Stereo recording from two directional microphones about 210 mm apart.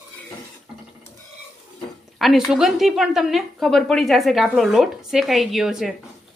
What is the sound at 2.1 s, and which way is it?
A woman's voice, centre (ahead or behind).